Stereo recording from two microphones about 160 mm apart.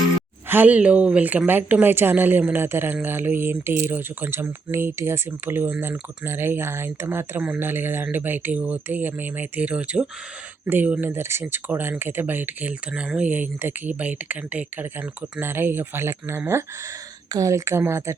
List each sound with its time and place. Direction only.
0.4 s speech: 10° right (ahead or behind)